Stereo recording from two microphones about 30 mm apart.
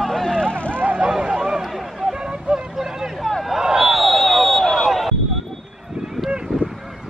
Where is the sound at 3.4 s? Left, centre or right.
Centre.